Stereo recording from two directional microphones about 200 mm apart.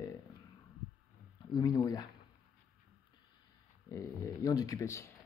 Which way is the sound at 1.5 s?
20° left (ahead or behind).